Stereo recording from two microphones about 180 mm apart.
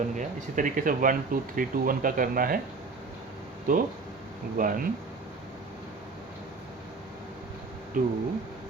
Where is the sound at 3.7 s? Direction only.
50° right (ahead or behind).